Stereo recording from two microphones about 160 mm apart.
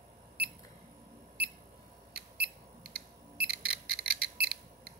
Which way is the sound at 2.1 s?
75° right (ahead or behind).